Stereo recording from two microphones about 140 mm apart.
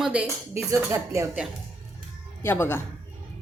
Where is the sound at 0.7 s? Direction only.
20° right (ahead or behind).